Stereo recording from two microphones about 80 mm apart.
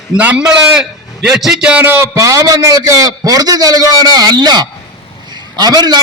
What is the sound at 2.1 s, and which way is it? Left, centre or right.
A man's voice, right.